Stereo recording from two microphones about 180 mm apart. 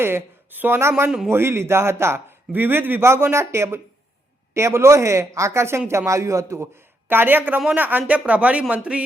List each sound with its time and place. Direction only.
0.0 s a man's voice: 10° right (ahead or behind)